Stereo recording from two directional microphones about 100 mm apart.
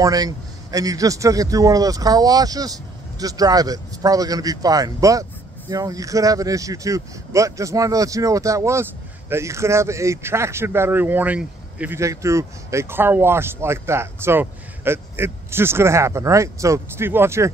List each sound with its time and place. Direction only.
0.0 s speech: 40° right (ahead or behind); by 12.0 s 15° right (ahead or behind)
12.0 s speech: 30° right (ahead or behind)